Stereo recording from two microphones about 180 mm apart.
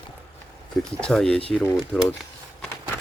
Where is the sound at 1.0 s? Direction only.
5° left (ahead or behind).